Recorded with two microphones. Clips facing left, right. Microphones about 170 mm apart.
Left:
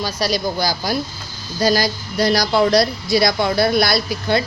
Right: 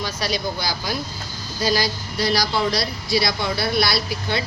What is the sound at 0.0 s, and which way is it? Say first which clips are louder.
Speech: left 4 dB; 40° left (ahead or behind).